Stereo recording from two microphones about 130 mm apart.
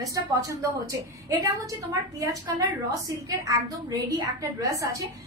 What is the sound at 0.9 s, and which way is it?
A woman's voice, 25° right (ahead or behind).